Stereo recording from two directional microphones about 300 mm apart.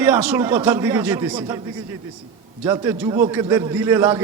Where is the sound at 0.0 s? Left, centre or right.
Centre.